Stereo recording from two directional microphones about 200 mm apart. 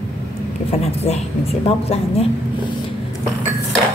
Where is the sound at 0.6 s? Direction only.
30° left (ahead or behind).